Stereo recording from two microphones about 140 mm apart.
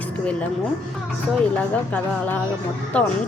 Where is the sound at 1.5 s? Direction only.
10° left (ahead or behind).